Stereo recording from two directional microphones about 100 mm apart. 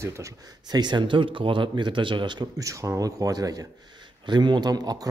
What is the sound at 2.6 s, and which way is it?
A man's voice, 35° right (ahead or behind).